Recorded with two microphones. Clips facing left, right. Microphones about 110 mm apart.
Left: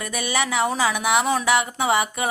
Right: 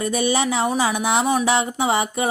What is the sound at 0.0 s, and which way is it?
Speech, 30° right (ahead or behind).